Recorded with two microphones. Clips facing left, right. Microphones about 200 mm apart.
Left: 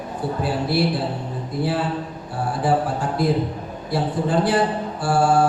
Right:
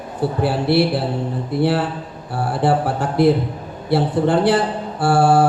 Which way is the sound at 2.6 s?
70° right (ahead or behind).